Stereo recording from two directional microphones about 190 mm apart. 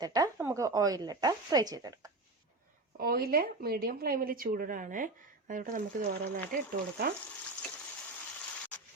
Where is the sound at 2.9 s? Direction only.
55° right (ahead or behind).